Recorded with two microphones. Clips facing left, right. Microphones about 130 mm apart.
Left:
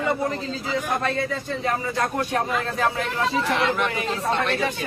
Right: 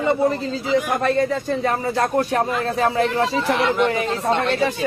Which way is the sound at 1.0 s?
40° right (ahead or behind).